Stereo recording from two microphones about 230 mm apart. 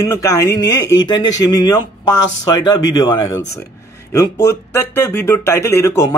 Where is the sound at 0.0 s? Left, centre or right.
Centre.